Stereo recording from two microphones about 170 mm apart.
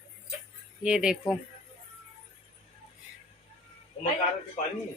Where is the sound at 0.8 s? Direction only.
5° right (ahead or behind).